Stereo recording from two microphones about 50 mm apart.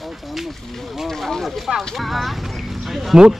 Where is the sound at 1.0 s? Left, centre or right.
Centre.